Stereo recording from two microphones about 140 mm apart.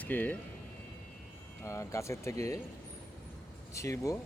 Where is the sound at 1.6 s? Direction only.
20° left (ahead or behind).